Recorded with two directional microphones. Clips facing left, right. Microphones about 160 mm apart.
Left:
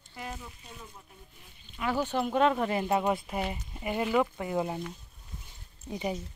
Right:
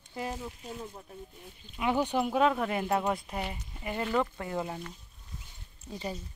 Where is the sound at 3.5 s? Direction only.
20° left (ahead or behind).